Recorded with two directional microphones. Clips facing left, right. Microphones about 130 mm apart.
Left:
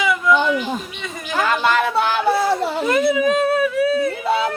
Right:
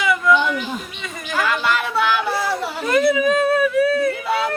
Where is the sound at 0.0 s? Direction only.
Centre (ahead or behind).